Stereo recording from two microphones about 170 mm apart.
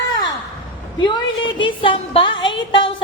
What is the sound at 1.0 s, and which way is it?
A woman's voice, 25° left (ahead or behind).